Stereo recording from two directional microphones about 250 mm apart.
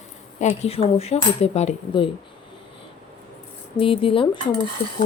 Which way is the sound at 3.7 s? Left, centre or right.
Left.